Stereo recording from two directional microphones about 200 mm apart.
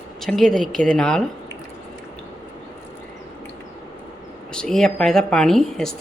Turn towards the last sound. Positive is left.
turn(degrees=0)  # may be behind; listen again after turning